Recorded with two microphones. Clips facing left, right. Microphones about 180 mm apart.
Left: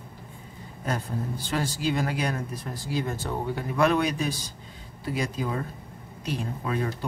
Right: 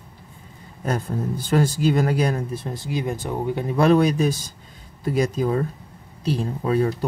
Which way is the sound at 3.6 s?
35° right (ahead or behind).